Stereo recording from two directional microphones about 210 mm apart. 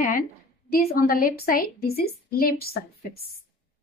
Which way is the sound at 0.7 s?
45° left (ahead or behind).